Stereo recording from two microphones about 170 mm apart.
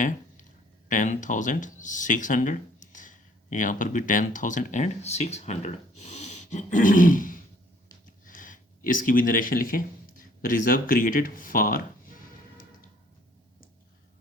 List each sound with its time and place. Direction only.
0.9 s speech: 50° left (ahead or behind)
8.2 s a sound: 50° left (ahead or behind)
10.4 s speech: 55° left (ahead or behind)